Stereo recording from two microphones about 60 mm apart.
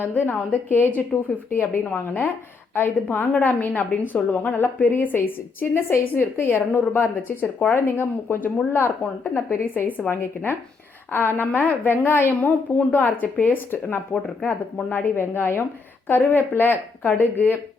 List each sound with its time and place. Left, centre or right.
0.1 s a woman's voice: left
2.0 s a woman's voice: left